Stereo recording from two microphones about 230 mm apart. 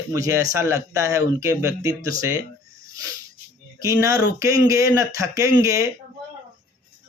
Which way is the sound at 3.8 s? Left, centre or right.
Centre.